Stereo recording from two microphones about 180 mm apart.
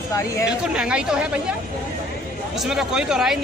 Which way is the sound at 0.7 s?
5° right (ahead or behind).